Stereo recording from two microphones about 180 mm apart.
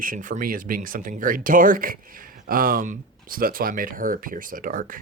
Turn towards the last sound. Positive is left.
turn(degrees=-50)  # may be behind; listen again after turning